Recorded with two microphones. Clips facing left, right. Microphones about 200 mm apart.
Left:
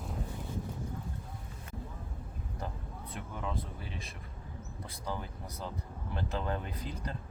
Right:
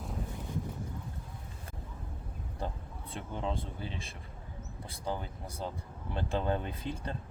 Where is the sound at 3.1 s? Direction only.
30° right (ahead or behind).